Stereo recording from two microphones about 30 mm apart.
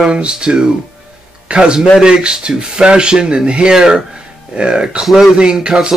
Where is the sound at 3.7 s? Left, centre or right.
Right.